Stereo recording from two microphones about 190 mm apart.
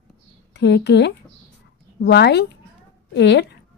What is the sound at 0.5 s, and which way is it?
A woman's voice, 65° left (ahead or behind).